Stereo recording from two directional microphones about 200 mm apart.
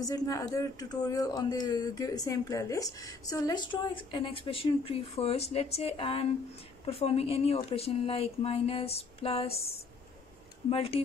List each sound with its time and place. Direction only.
0.0 s speech: 15° left (ahead or behind)
10.7 s speech: 30° left (ahead or behind)